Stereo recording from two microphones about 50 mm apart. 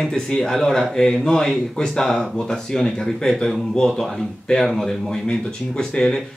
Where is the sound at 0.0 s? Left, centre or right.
Centre.